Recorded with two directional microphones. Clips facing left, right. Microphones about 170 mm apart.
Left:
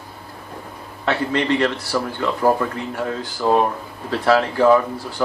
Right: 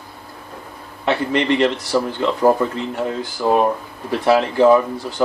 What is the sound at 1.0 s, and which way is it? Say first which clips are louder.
Speech: right 2 dB; 20° right (ahead or behind).